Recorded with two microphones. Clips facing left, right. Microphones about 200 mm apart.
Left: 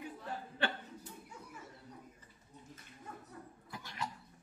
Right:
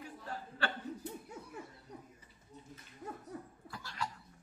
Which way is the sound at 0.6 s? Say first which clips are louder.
Left 1 dB; 20° left (ahead or behind).